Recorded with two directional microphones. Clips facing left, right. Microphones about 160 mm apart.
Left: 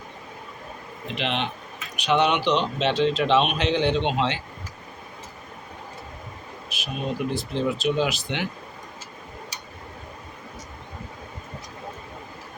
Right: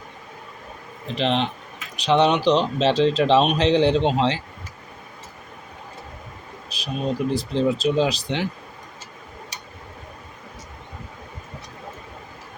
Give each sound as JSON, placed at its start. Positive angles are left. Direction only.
{"t": 1.1, "sound": "speech", "side_deg": -35}
{"t": 6.7, "sound": "speech", "side_deg": -35}